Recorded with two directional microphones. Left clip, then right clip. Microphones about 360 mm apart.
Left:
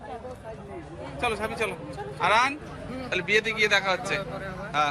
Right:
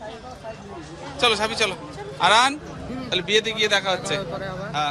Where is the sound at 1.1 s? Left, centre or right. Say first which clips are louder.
Right 8 dB; centre.